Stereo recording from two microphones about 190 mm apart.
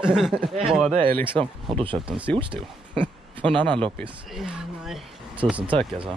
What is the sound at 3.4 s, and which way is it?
Speech, 25° right (ahead or behind).